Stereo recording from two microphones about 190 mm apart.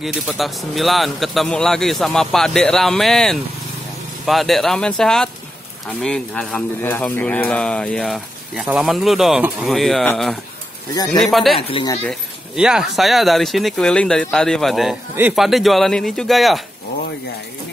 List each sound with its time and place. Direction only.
0.0 s speech: centre (ahead or behind)
11.5 s speech: 25° left (ahead or behind)
12.1 s speech: 5° right (ahead or behind)